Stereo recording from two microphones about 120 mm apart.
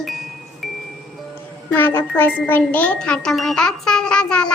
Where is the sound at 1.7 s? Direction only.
20° left (ahead or behind).